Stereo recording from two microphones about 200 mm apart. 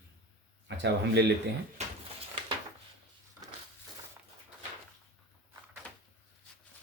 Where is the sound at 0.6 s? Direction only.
60° right (ahead or behind).